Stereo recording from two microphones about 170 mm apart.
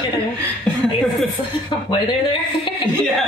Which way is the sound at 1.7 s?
25° left (ahead or behind).